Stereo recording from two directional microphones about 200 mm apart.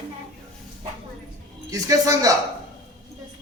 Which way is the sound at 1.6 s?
15° right (ahead or behind).